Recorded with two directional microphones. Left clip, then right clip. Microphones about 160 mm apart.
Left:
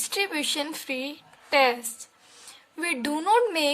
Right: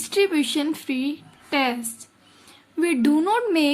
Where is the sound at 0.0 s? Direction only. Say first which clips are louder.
Right 6 dB; 20° left (ahead or behind).